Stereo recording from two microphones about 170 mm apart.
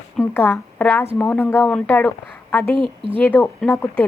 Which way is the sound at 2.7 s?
30° right (ahead or behind).